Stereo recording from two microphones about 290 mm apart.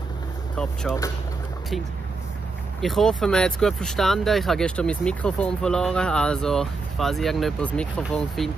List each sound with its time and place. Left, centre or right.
2.8 s speech: centre